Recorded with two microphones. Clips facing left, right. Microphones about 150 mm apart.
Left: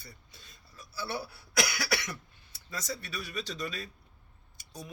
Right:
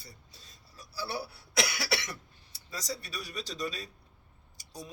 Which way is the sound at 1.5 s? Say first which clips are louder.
Even; 25° right (ahead or behind).